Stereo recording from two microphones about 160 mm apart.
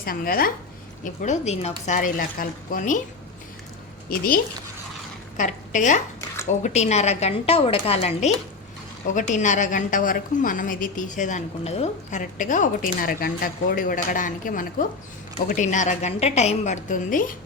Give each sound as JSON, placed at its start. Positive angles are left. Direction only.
{"t": 0.0, "sound": "speech", "side_deg": 65}
{"t": 1.0, "sound": "a woman's voice", "side_deg": 50}
{"t": 4.1, "sound": "speech", "side_deg": 70}
{"t": 5.4, "sound": "a woman's voice", "side_deg": 50}
{"t": 12.2, "sound": "a woman's voice", "side_deg": 55}